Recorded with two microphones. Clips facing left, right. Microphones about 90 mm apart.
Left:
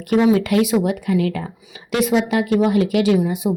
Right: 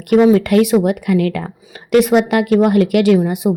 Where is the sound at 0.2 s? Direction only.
45° right (ahead or behind).